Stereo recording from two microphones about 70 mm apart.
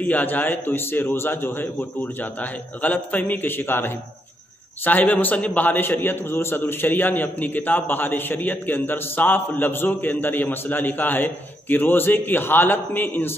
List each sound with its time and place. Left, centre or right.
0.0 s a man's voice: left